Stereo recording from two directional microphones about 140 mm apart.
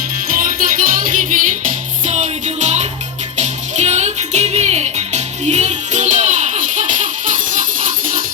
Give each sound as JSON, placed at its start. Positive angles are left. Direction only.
{"t": 0.3, "sound": "music", "side_deg": -85}
{"t": 2.0, "sound": "music", "side_deg": -55}